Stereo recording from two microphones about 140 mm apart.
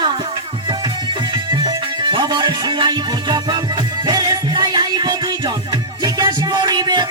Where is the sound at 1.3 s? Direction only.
35° right (ahead or behind).